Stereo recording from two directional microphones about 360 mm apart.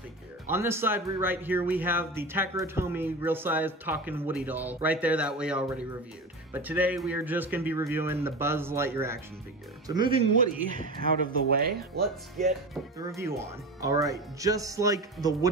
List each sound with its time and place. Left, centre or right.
0.5 s speech: centre; by 11.8 s right
13.0 s speech: centre